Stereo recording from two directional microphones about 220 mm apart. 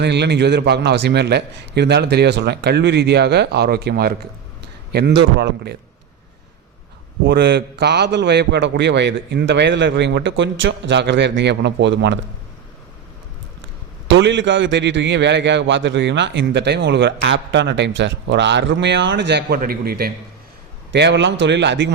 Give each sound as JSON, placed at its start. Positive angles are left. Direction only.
{"t": 0.0, "sound": "a man's voice", "side_deg": -50}
{"t": 7.3, "sound": "a man's voice", "side_deg": -50}
{"t": 14.1, "sound": "a man's voice", "side_deg": -55}